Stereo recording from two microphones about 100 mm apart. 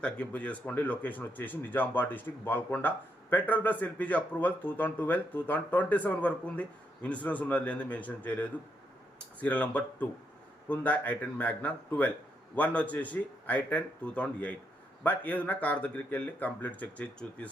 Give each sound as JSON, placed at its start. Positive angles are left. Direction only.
{"t": 0.0, "sound": "speech", "side_deg": 15}